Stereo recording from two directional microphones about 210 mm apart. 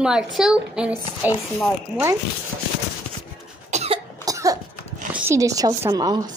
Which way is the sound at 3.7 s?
30° right (ahead or behind).